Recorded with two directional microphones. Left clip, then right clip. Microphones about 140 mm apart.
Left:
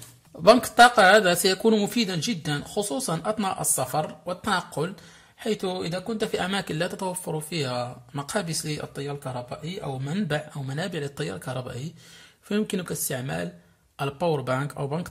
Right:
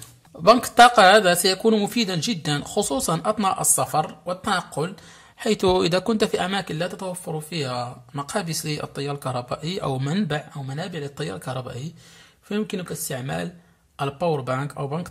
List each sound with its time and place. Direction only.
0.4 s speech: centre (ahead or behind)
5.6 s speech: 40° right (ahead or behind)
6.3 s speech: centre (ahead or behind); by 10.0 s 40° right (ahead or behind)
10.2 s speech: 5° left (ahead or behind)
11.1 s speech: centre (ahead or behind)
12.4 s speech: 10° left (ahead or behind)